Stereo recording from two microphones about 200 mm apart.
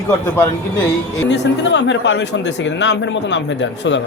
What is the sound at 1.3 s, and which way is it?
Speech, 65° left (ahead or behind).